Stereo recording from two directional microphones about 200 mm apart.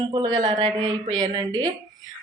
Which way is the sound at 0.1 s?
25° right (ahead or behind).